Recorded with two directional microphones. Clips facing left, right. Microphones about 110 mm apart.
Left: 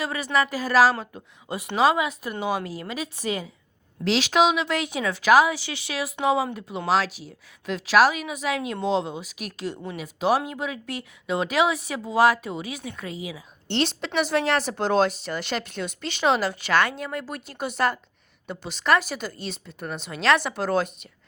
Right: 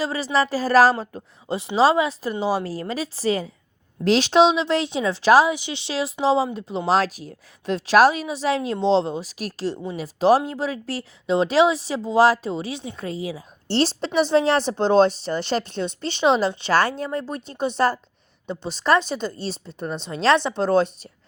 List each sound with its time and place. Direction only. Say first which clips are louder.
0.0 s a woman's voice: right 3 dB; 30° right (ahead or behind)
0.9 s a woman's voice: right 4 dB; 30° right (ahead or behind)
6.9 s a woman's voice: right 2 dB; 45° right (ahead or behind)